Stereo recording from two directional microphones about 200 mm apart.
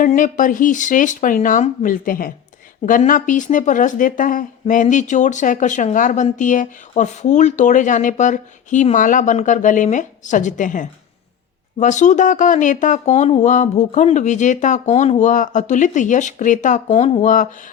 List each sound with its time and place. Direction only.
0.0 s speech: 40° left (ahead or behind)